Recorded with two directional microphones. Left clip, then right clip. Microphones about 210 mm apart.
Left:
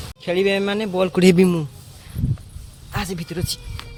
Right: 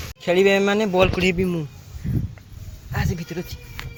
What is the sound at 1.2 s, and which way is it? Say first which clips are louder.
Speech: left 6 dB; 50° left (ahead or behind).